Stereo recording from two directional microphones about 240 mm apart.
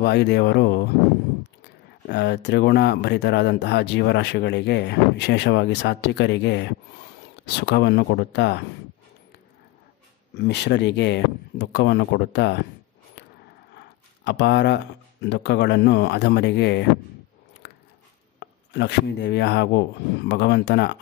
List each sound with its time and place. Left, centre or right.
0.0 s speech: left
2.0 s speech: left
10.3 s speech: left
13.7 s a sound: left
15.2 s speech: left
17.6 s biting: left
18.4 s speech: left